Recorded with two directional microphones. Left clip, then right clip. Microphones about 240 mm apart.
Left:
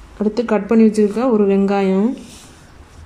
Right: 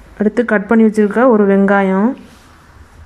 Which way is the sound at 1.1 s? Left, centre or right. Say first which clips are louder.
Right 5 dB; right.